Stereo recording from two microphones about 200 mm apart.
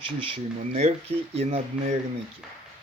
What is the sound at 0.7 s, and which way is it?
Speech, 30° right (ahead or behind).